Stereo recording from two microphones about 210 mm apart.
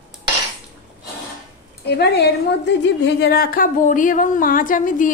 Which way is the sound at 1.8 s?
50° left (ahead or behind).